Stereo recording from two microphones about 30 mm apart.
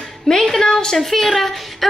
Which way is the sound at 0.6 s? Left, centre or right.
Left.